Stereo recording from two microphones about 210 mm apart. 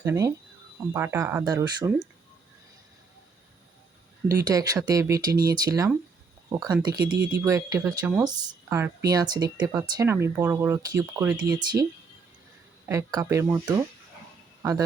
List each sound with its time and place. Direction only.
0.0 s speech: 10° right (ahead or behind)
4.4 s speech: 15° right (ahead or behind)
11.5 s speech: 20° right (ahead or behind)